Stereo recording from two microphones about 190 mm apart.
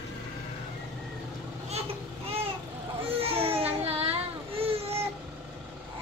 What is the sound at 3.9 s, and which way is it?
Child singing, 30° right (ahead or behind).